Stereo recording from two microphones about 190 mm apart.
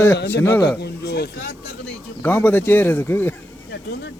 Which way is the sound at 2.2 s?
10° left (ahead or behind).